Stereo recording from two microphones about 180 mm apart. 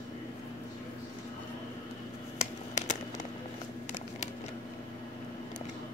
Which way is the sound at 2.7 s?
40° left (ahead or behind).